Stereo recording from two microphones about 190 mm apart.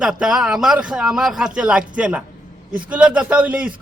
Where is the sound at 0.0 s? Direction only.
5° right (ahead or behind).